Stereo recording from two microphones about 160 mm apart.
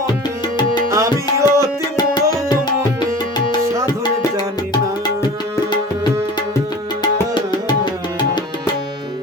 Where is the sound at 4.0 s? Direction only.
25° left (ahead or behind).